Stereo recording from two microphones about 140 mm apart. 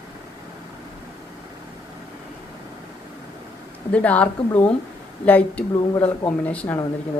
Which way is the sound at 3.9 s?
10° left (ahead or behind).